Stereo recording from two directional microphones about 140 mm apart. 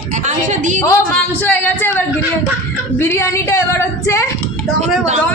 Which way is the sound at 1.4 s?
15° left (ahead or behind).